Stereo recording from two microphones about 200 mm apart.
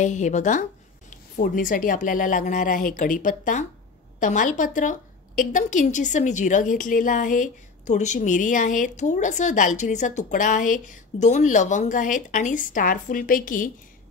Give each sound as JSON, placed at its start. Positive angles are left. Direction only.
{"t": 0.0, "sound": "a woman's voice", "side_deg": 35}